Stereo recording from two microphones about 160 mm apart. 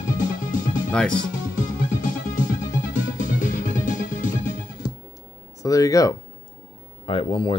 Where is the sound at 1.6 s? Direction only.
55° left (ahead or behind).